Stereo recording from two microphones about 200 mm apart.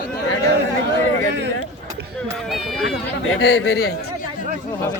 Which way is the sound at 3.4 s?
65° left (ahead or behind).